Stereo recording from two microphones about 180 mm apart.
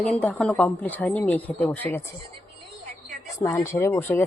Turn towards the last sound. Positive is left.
turn(degrees=10)  # may be behind; listen again after turning